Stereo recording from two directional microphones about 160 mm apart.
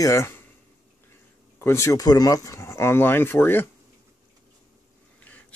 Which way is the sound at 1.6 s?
15° left (ahead or behind).